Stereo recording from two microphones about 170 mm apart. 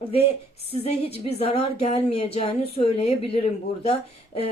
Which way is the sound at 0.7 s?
40° left (ahead or behind).